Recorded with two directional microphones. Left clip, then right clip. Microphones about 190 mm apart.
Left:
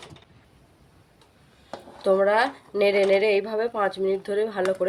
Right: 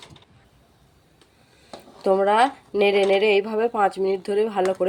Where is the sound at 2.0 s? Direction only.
35° right (ahead or behind).